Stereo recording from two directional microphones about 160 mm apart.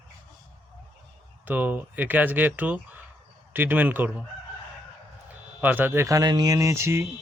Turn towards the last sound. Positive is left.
turn(degrees=-15)  # may be behind; listen again after turning